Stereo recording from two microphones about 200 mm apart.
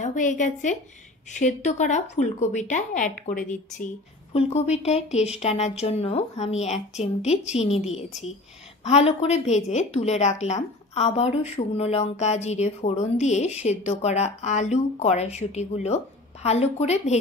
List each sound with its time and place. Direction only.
0.0 s a woman's voice: 40° left (ahead or behind)